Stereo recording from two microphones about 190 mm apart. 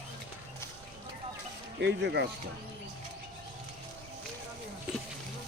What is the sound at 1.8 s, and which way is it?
Speech, 65° right (ahead or behind).